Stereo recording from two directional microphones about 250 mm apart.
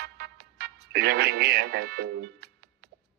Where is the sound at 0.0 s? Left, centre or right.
Right.